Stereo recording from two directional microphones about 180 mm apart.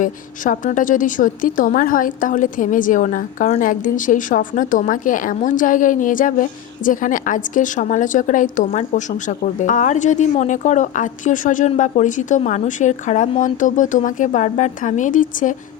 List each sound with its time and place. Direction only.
0.0 s a woman's voice: 45° left (ahead or behind)